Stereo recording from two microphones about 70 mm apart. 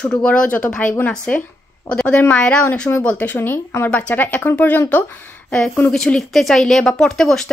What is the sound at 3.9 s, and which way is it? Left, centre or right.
Speech, centre.